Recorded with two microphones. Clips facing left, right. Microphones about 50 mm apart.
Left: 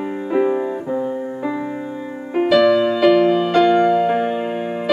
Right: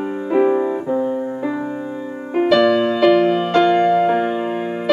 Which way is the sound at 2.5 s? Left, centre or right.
Centre.